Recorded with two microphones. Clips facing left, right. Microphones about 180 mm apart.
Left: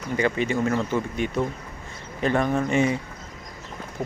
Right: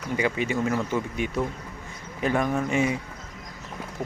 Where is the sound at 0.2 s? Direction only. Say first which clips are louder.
Left 3 dB; 10° right (ahead or behind).